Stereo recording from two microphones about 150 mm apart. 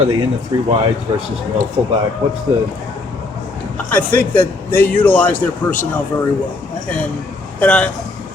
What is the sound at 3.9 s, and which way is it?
A man's voice, 10° left (ahead or behind).